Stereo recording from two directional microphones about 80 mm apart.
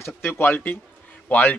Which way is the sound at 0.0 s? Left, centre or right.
Left.